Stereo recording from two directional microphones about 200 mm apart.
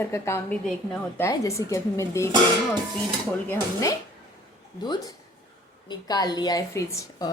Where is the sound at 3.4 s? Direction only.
15° left (ahead or behind).